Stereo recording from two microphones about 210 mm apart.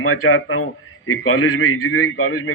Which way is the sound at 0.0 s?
90° left.